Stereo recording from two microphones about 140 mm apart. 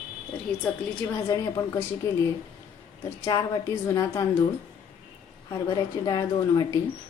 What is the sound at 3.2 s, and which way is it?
A woman's voice, 25° left (ahead or behind).